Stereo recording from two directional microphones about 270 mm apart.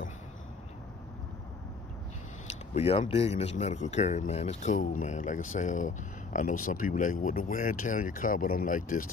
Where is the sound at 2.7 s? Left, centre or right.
Left.